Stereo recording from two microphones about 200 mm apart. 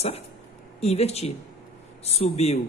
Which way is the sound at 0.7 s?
30° left (ahead or behind).